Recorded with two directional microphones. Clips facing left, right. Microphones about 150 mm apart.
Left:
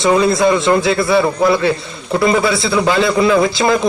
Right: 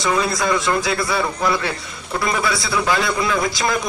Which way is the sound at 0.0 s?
25° left (ahead or behind).